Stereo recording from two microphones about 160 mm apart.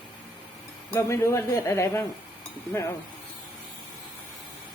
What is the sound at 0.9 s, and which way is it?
Speech, 20° left (ahead or behind).